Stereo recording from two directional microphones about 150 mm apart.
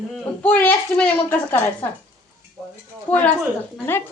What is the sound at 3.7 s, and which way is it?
Speech, 15° left (ahead or behind).